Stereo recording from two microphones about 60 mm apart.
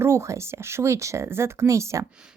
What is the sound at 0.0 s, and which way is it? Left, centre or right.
A woman's voice, right.